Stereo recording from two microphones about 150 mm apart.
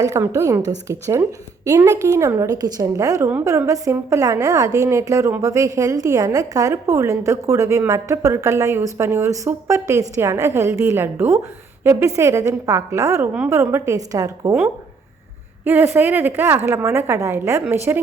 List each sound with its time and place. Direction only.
0.0 s a woman's voice: 20° right (ahead or behind)
15.6 s a woman's voice: 15° right (ahead or behind)